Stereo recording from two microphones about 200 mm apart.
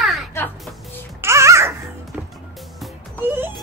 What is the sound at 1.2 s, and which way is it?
Babbling, 15° right (ahead or behind).